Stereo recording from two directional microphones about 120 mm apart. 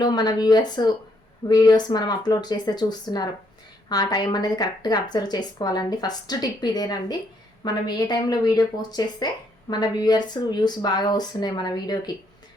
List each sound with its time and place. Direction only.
0.0 s a woman's voice: 35° left (ahead or behind)